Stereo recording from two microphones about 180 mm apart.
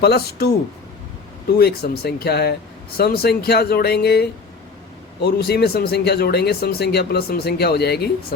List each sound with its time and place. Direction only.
0.0 s speech: 60° left (ahead or behind)
1.5 s speech: 60° left (ahead or behind)